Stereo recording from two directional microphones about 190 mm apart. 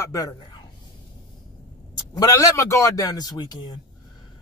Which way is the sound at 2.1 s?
15° left (ahead or behind).